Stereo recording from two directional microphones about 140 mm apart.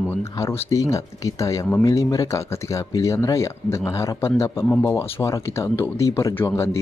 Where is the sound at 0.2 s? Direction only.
20° left (ahead or behind).